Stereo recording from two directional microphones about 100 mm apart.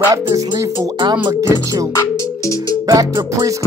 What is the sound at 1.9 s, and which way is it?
Music, 35° left (ahead or behind).